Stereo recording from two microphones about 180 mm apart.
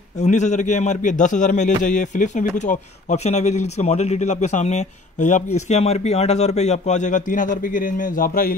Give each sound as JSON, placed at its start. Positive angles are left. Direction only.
{"t": 0.2, "sound": "a man's voice", "side_deg": 40}